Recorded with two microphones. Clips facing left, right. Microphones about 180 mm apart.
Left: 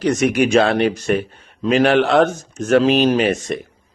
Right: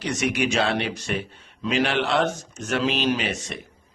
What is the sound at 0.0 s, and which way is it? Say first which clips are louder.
Speech: left 8 dB; 50° left (ahead or behind).